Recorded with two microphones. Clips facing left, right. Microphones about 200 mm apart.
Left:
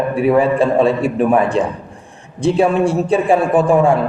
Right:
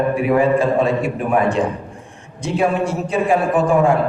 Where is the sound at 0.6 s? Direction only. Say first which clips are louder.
Left 3 dB; 30° left (ahead or behind).